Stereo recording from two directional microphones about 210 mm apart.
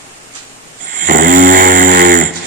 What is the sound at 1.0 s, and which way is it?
Snoring, 40° right (ahead or behind).